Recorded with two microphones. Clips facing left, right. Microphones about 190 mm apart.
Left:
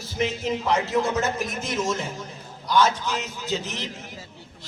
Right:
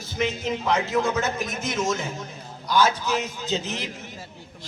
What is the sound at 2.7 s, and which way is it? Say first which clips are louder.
Speech: even; 5° right (ahead or behind).